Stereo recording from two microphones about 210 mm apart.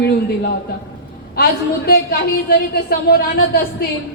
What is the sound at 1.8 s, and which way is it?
Speech, 45° left (ahead or behind).